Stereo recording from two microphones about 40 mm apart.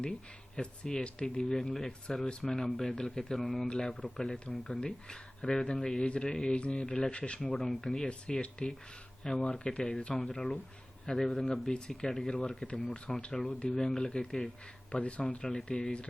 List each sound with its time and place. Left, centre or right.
0.5 s speech: left
3.7 s speech: left
4.5 s speech: centre
7.5 s speech: centre
11.7 s speech: centre
13.3 s speech: centre